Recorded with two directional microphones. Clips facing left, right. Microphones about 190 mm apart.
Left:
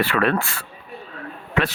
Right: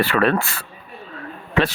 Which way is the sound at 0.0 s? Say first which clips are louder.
Right 2 dB; 35° right (ahead or behind).